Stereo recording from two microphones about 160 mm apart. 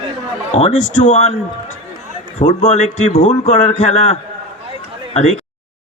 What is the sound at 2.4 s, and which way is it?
A man's voice, 45° left (ahead or behind).